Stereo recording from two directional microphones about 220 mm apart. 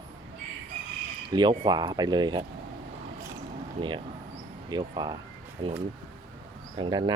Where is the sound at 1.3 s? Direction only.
20° right (ahead or behind).